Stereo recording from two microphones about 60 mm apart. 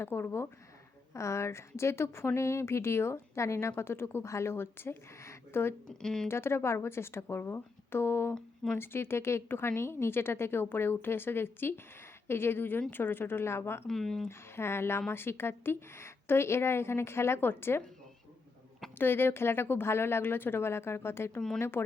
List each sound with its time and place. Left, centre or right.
0.0 s a woman's voice: left
1.1 s a woman's voice: left
6.0 s a woman's voice: centre
6.2 s a woman's voice: left
13.8 s speech: centre
14.3 s speech: left
18.9 s a woman's voice: left